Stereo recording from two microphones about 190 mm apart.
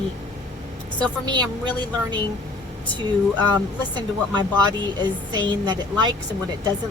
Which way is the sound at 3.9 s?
20° right (ahead or behind).